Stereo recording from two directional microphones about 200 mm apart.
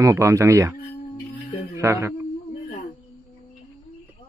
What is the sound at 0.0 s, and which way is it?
Speech, 15° right (ahead or behind).